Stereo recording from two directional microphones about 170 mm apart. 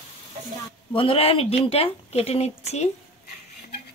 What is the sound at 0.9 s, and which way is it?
Speech, 30° left (ahead or behind).